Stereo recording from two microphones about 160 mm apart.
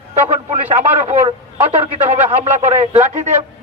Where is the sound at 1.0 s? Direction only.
45° right (ahead or behind).